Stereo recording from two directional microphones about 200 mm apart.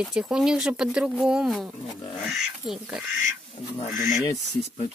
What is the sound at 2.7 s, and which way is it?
Speech, centre (ahead or behind).